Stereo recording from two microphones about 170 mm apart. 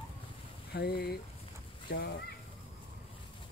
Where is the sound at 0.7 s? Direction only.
70° left (ahead or behind).